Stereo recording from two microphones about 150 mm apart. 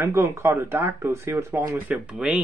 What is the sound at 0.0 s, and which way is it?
Speech, 15° right (ahead or behind).